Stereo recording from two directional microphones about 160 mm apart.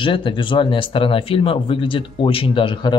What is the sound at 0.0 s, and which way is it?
Speech, 30° left (ahead or behind).